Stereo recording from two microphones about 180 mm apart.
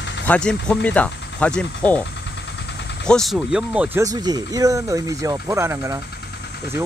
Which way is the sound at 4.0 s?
20° right (ahead or behind).